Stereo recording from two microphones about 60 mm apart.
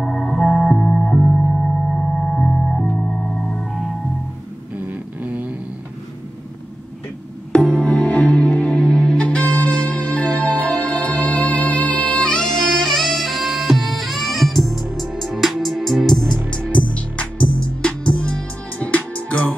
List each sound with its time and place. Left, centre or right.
0.3 s music: centre
4.8 s a sound: right
7.7 s music: centre
16.4 s music: centre